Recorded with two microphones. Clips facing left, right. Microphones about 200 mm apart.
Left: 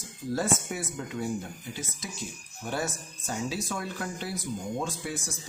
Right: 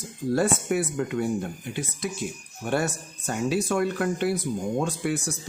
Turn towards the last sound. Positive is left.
turn(degrees=-65)  # may be behind; listen again after turning